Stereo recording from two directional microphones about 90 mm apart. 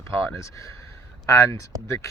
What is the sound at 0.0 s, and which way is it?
Speech, 35° left (ahead or behind).